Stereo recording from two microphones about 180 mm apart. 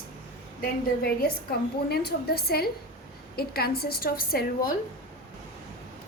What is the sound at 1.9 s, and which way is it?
A woman's voice, 60° left (ahead or behind).